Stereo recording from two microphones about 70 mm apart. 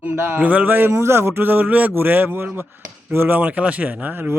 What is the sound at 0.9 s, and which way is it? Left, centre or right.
A man's voice, right.